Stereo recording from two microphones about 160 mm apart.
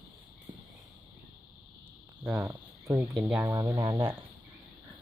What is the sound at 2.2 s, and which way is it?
Speech, 15° right (ahead or behind).